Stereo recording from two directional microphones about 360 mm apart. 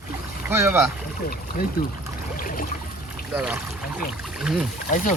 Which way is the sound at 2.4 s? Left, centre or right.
Left.